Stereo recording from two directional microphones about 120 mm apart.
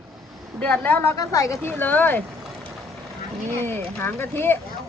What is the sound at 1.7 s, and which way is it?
Speech, 15° left (ahead or behind).